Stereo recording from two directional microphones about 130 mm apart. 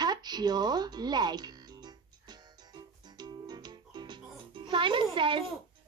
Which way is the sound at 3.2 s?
30° right (ahead or behind).